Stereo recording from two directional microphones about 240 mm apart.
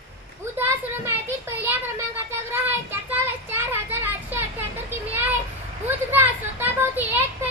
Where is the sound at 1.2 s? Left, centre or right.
Centre.